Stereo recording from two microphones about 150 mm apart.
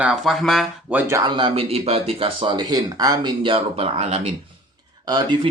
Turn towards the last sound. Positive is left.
turn(degrees=-25)  # may be behind; listen again after turning